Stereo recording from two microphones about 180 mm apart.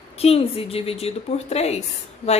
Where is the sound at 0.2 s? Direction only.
35° left (ahead or behind).